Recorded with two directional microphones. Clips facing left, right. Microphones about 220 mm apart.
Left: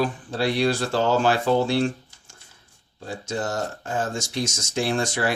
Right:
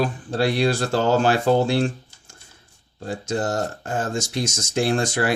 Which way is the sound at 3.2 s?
50° right (ahead or behind).